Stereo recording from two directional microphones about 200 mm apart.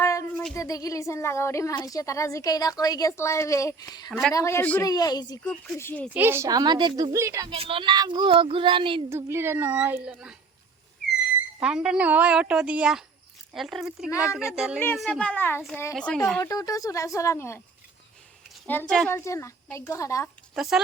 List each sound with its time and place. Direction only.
0.0 s a sound: 15° left (ahead or behind)
0.5 s a woman's voice: 15° left (ahead or behind)
5.4 s a woman's voice: 5° left (ahead or behind)
6.1 s a woman's voice: 10° right (ahead or behind)
7.5 s speech: 30° right (ahead or behind)
9.0 s a woman's voice: 10° right (ahead or behind)
11.6 s speech: 5° right (ahead or behind)
16.4 s a woman's voice: 15° left (ahead or behind)
18.6 s a woman's voice: 5° left (ahead or behind)
20.6 s speech: centre (ahead or behind)